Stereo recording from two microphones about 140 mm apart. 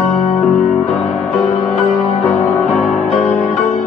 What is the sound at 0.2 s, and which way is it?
Music, 65° left (ahead or behind).